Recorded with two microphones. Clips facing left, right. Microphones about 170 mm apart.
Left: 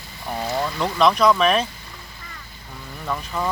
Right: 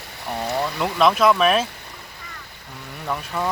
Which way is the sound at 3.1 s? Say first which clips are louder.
Even; 5° right (ahead or behind).